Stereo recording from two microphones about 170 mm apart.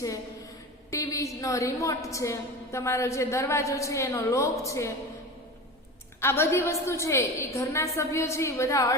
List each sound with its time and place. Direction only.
0.9 s a woman's voice: 20° left (ahead or behind)
6.1 s a woman's voice: 15° left (ahead or behind)